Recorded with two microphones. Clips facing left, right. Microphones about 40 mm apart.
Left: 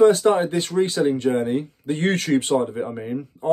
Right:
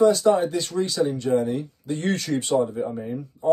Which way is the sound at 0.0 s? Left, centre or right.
Left.